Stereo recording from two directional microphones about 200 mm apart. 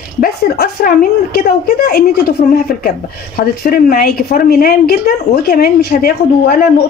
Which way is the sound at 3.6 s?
50° left (ahead or behind).